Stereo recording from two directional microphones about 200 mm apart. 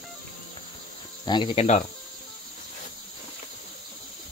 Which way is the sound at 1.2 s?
25° left (ahead or behind).